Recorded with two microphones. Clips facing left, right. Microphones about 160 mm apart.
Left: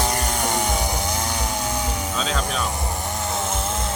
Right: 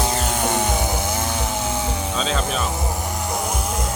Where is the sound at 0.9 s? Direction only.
15° left (ahead or behind).